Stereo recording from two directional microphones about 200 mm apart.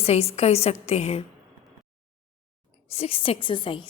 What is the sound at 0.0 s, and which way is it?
Speech, 30° left (ahead or behind).